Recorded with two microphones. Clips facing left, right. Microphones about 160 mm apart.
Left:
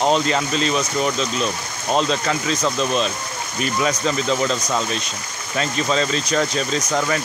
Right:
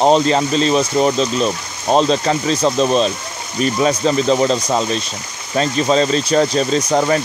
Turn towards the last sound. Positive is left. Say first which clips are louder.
# right 6 dB
turn(degrees=-35)  # may be behind; listen again after turning